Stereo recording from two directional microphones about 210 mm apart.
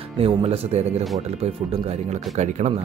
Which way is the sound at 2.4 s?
35° right (ahead or behind).